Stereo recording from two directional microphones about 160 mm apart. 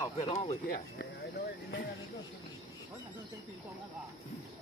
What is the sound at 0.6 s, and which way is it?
Speech, 75° left (ahead or behind).